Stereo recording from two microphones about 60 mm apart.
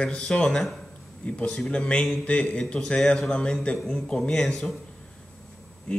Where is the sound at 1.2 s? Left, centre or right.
Left.